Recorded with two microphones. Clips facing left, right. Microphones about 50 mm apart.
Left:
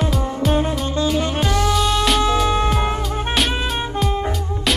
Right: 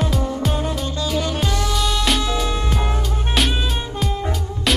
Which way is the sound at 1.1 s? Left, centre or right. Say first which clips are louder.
Left 2 dB; left.